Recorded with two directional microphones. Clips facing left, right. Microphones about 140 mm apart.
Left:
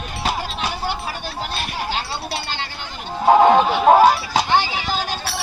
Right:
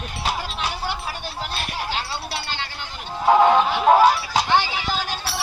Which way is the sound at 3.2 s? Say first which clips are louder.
Left 3 dB; 30° left (ahead or behind).